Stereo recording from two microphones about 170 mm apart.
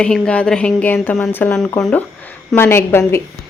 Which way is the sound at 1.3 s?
10° left (ahead or behind).